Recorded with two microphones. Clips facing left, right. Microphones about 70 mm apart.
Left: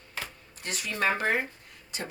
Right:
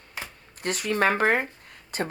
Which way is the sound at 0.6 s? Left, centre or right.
Right.